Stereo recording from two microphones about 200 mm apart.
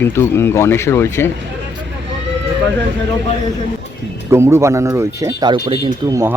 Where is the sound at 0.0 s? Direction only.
10° left (ahead or behind).